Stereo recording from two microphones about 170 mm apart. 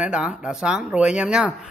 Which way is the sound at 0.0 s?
5° right (ahead or behind).